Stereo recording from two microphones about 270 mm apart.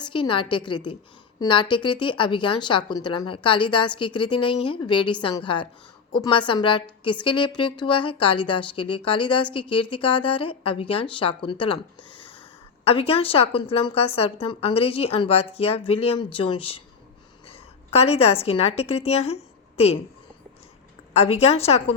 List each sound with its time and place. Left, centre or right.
0.1 s a woman's voice: centre
12.8 s a woman's voice: left
21.1 s a woman's voice: left